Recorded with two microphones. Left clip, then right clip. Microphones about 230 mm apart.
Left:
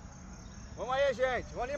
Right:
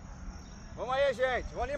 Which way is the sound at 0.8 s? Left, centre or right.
Centre.